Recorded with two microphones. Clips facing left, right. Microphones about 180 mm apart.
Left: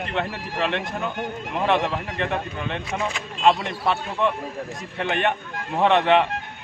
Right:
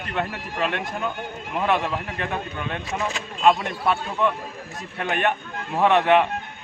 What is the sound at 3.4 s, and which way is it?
Speech, 25° left (ahead or behind).